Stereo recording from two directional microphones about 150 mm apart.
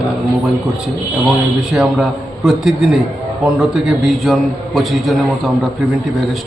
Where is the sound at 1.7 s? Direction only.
5° right (ahead or behind).